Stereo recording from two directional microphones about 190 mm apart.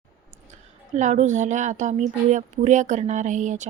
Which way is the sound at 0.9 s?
40° right (ahead or behind).